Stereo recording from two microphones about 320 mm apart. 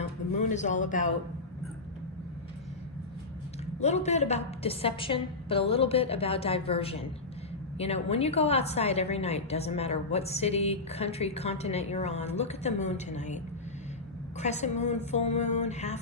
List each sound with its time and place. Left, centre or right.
0.3 s speech: left
3.8 s a woman's voice: left